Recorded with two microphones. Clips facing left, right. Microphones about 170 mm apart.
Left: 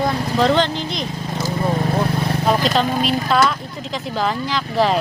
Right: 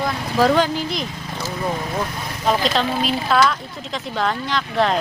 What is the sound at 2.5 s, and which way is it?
Speech, centre (ahead or behind).